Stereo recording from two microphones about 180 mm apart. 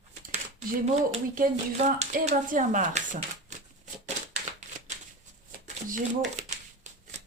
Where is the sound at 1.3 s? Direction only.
45° right (ahead or behind).